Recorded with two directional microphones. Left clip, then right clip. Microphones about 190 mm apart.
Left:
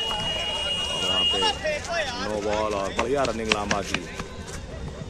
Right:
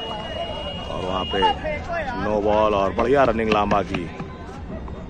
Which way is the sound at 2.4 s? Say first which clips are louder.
Right 8 dB; centre (ahead or behind).